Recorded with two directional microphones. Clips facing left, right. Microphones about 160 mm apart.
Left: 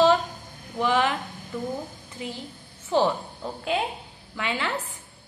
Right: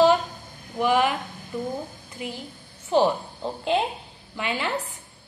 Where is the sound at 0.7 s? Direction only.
15° right (ahead or behind).